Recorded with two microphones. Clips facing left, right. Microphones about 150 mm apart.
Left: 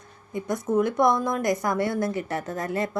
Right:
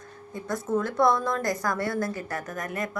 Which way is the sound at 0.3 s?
20° left (ahead or behind).